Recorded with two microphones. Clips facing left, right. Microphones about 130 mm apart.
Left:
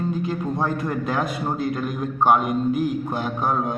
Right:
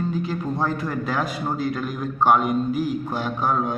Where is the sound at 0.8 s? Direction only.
20° left (ahead or behind).